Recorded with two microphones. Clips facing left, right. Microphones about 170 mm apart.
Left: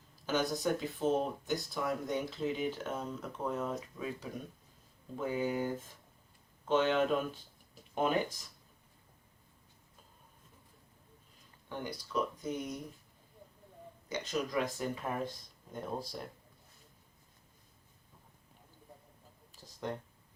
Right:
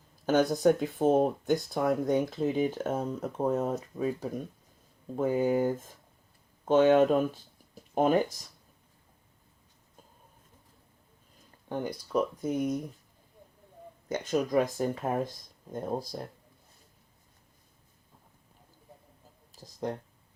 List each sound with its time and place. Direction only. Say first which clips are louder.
0.3 s speech: right 9 dB; 50° right (ahead or behind)
11.7 s speech: right 7 dB; 45° right (ahead or behind)
14.1 s speech: right 7 dB; 45° right (ahead or behind)
19.5 s a sound: right 5 dB; 40° right (ahead or behind)